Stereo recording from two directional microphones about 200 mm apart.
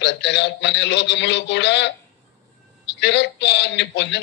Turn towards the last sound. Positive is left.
turn(degrees=60)  # may be behind; listen again after turning